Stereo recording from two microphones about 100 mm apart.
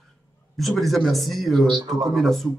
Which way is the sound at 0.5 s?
Centre (ahead or behind).